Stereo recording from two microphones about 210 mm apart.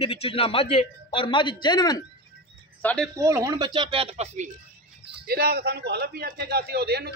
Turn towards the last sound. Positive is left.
turn(degrees=-50)  # may be behind; listen again after turning